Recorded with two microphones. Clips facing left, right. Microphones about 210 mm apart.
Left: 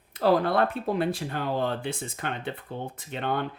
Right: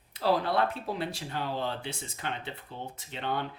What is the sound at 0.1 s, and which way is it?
Speech, 50° left (ahead or behind).